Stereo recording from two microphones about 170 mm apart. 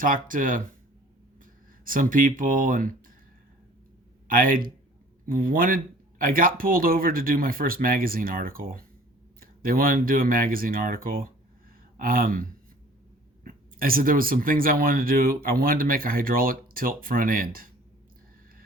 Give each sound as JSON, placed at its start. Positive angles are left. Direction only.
{"t": 0.0, "sound": "speech", "side_deg": -50}
{"t": 1.8, "sound": "speech", "side_deg": -55}
{"t": 4.3, "sound": "speech", "side_deg": -55}